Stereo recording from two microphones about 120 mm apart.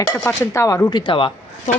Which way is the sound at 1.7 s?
80° left.